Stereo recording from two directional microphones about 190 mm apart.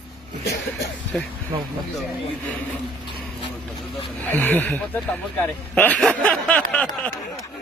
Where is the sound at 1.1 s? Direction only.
5° left (ahead or behind).